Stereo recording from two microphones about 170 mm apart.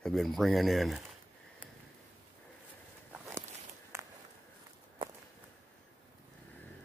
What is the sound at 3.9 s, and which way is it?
Walk, 15° right (ahead or behind).